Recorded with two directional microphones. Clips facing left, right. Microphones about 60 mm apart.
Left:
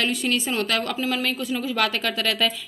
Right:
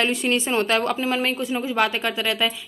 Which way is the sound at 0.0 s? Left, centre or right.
Right.